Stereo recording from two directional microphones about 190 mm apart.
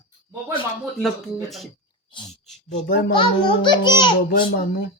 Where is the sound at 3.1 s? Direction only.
25° left (ahead or behind).